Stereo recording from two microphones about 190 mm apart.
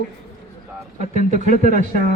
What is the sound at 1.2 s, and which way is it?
Speech, 40° right (ahead or behind).